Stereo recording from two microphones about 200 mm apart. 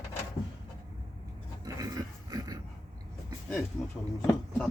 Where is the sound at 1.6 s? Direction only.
20° right (ahead or behind).